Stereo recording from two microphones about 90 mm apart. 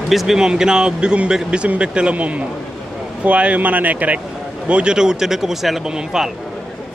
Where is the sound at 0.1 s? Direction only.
5° right (ahead or behind).